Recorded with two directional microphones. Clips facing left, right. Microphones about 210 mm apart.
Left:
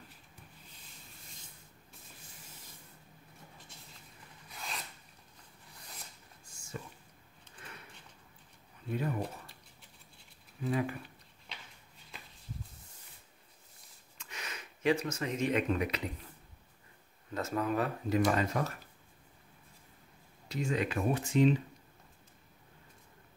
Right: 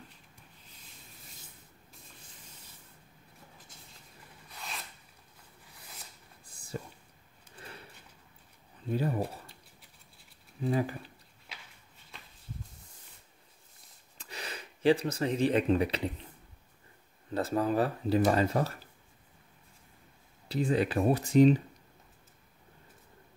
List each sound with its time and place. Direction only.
6.4 s whispering: 35° right (ahead or behind)
8.9 s speech: 35° right (ahead or behind)
10.6 s speech: 30° right (ahead or behind)
14.1 s speech: 35° right (ahead or behind)
17.3 s speech: 35° right (ahead or behind)
20.4 s speech: 35° right (ahead or behind)